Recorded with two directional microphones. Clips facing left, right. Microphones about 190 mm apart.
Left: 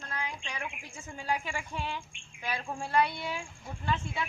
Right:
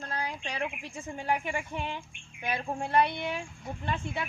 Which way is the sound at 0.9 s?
20° right (ahead or behind).